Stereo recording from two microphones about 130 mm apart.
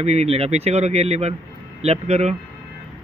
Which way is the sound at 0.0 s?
55° right (ahead or behind).